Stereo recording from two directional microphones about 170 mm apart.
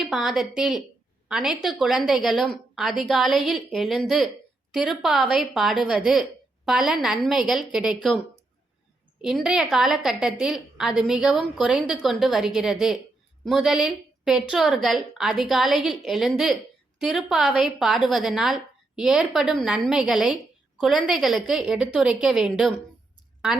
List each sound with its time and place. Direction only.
0.3 s a woman's voice: 5° right (ahead or behind)
9.2 s a woman's voice: 5° right (ahead or behind)